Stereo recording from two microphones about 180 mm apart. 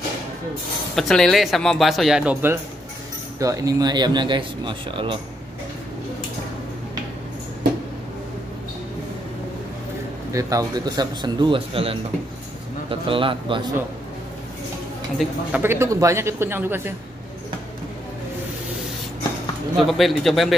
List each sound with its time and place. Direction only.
0.9 s speech: centre (ahead or behind); by 5.2 s 30° right (ahead or behind)
10.3 s speech: 20° right (ahead or behind)
15.1 s speech: 10° right (ahead or behind)
19.9 s speech: centre (ahead or behind)